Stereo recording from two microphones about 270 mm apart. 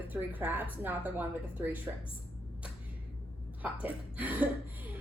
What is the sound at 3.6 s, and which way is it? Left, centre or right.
Speech, centre.